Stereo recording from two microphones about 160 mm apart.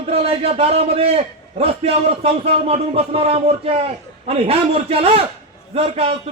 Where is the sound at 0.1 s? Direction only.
40° right (ahead or behind).